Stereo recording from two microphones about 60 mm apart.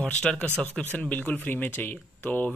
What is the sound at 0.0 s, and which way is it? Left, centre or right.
Speech, centre.